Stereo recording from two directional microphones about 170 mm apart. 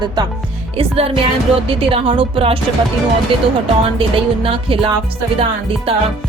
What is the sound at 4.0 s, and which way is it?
Speech, 30° right (ahead or behind).